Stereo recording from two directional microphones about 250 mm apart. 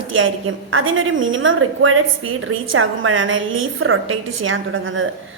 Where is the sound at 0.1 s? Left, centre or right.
Right.